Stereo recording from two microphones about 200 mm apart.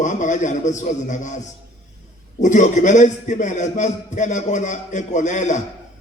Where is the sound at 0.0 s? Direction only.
40° left (ahead or behind).